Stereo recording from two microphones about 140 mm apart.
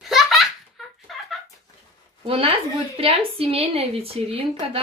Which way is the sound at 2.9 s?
45° right (ahead or behind).